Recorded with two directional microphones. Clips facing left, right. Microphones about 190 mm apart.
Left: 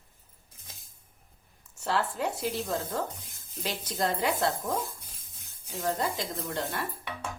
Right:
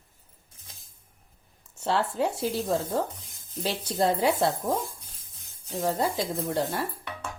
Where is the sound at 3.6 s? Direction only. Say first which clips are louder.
Right 5 dB; 30° right (ahead or behind).